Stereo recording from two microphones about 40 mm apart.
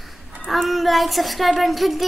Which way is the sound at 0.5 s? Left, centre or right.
Centre.